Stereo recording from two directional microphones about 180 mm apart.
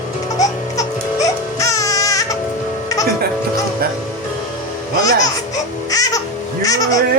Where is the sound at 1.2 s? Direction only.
20° left (ahead or behind).